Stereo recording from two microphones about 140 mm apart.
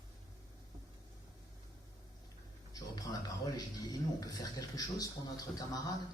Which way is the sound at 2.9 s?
25° left (ahead or behind).